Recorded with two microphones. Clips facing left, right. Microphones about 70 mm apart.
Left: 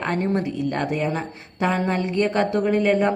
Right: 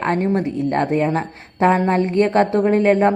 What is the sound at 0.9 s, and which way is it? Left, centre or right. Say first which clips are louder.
Speech: right 6 dB; right.